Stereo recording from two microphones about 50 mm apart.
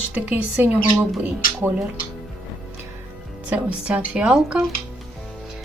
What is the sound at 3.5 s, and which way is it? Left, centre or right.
A woman's voice, right.